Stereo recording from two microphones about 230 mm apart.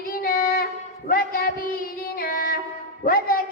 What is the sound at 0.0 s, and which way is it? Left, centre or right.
Child singing, left.